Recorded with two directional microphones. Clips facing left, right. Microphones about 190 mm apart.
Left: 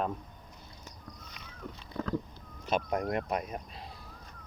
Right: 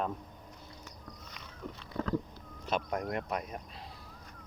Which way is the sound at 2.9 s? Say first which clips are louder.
Left 3 dB; 20° left (ahead or behind).